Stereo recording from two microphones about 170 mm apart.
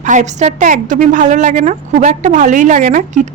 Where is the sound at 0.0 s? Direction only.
45° right (ahead or behind).